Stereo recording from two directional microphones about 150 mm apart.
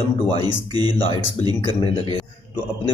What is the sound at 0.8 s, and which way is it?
Speech, 35° left (ahead or behind).